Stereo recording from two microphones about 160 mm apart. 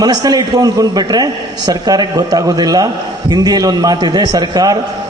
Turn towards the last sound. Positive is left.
turn(degrees=-25)  # may be behind; listen again after turning